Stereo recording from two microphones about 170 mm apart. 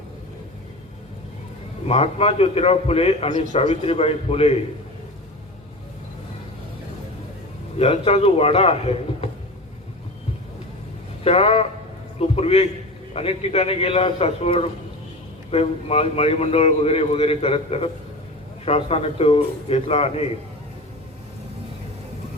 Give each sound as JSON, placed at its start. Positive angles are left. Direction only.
{"t": 1.9, "sound": "a man's voice", "side_deg": 35}
{"t": 7.8, "sound": "a man's voice", "side_deg": 35}
{"t": 11.2, "sound": "a man's voice", "side_deg": 35}